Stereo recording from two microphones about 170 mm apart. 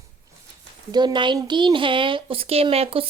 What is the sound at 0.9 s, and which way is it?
Speech, 25° right (ahead or behind).